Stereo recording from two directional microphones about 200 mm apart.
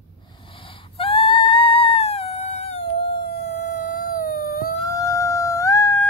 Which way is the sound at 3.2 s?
55° left (ahead or behind).